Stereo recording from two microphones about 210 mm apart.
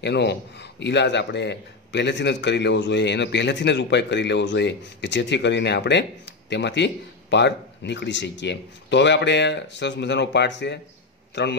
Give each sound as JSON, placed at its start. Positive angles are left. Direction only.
{"t": 0.0, "sound": "a man's voice", "side_deg": 55}